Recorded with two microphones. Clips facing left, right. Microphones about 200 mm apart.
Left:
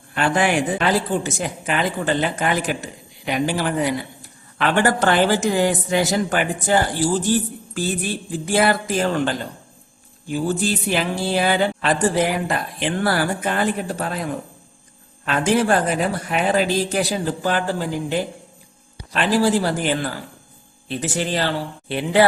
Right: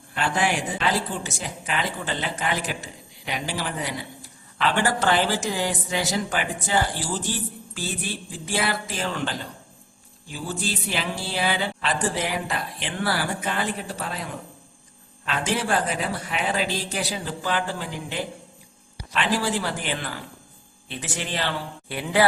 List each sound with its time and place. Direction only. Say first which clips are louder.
0.1 s speech: left 5 dB; 60° left (ahead or behind); by 21.5 s 40° left (ahead or behind)
21.8 s speech: left 5 dB; 25° left (ahead or behind)